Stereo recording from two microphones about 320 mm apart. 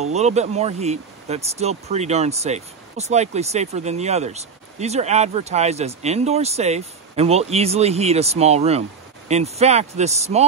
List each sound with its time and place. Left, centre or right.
0.0 s speech: right